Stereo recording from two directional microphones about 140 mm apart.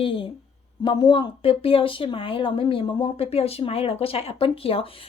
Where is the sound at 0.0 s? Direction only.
40° left (ahead or behind).